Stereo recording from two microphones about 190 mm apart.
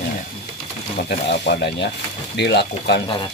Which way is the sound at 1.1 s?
60° left (ahead or behind).